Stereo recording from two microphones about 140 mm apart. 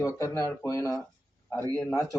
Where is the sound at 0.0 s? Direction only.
20° left (ahead or behind).